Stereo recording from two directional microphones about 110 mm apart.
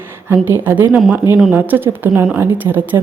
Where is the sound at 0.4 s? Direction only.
20° right (ahead or behind).